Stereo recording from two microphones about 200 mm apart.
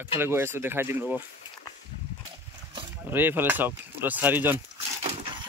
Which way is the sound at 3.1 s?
10° right (ahead or behind).